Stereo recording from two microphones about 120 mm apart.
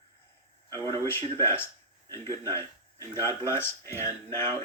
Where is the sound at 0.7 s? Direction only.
25° left (ahead or behind).